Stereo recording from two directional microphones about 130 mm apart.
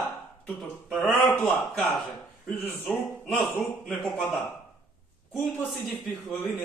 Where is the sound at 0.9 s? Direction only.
Centre (ahead or behind).